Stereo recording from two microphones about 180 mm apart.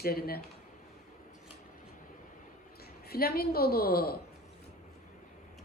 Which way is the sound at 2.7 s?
60° left (ahead or behind).